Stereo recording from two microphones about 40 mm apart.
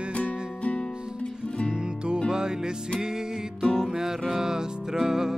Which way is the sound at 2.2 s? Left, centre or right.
Centre.